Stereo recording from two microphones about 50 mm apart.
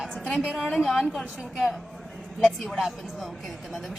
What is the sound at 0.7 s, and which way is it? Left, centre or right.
A woman's voice, centre.